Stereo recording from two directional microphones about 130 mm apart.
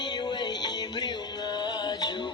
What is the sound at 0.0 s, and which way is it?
Music, 30° left (ahead or behind).